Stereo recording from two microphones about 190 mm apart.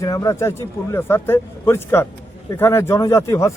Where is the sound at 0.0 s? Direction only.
20° left (ahead or behind).